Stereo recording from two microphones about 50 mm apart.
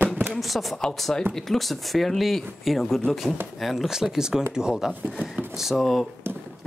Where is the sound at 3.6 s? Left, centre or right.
Centre.